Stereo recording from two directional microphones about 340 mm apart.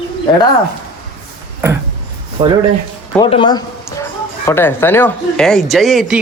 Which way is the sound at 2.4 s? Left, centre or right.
Centre.